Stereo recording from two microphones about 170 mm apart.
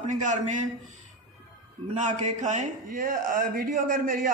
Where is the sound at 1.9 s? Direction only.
45° right (ahead or behind).